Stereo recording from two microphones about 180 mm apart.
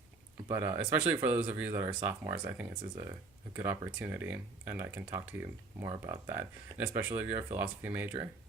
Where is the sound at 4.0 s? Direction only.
10° right (ahead or behind).